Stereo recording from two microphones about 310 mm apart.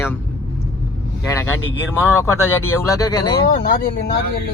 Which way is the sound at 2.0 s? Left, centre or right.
Centre.